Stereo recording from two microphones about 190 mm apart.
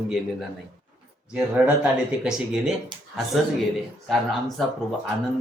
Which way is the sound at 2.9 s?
25° right (ahead or behind).